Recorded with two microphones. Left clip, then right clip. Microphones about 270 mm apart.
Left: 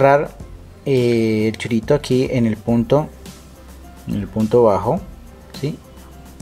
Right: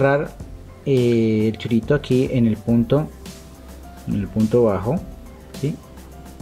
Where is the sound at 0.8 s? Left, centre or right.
Left.